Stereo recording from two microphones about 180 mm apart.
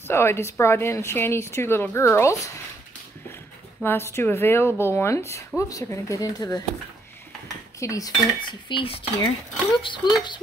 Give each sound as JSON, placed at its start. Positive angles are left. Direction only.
{"t": 0.1, "sound": "a woman's voice", "side_deg": 15}
{"t": 3.8, "sound": "a woman's voice", "side_deg": 15}
{"t": 5.6, "sound": "cutlery", "side_deg": 15}
{"t": 7.8, "sound": "cutlery", "side_deg": 20}